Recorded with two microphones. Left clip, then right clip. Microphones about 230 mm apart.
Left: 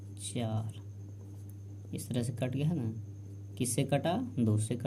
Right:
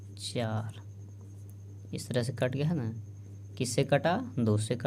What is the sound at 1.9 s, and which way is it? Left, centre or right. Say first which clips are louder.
Speech: right 5 dB; right.